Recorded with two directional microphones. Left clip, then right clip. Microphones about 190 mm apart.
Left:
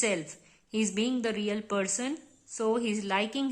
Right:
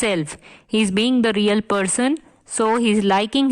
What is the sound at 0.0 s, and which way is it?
Speech, 45° right (ahead or behind).